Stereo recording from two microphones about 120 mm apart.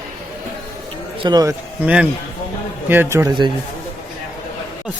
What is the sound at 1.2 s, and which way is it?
Speech, 40° right (ahead or behind).